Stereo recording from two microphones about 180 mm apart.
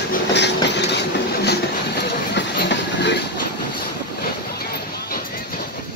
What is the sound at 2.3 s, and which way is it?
Train, 70° left (ahead or behind).